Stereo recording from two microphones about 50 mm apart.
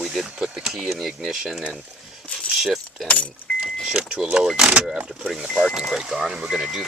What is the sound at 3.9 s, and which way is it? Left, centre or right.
Speech, centre.